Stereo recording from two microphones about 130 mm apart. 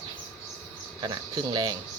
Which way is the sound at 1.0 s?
35° right (ahead or behind).